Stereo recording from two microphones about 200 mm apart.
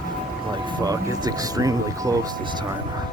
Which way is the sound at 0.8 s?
20° right (ahead or behind).